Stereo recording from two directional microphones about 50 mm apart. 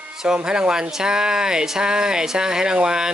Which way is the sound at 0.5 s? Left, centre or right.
Centre.